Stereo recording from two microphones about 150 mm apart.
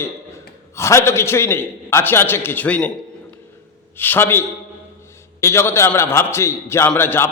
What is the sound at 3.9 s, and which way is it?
A man's voice, 15° left (ahead or behind).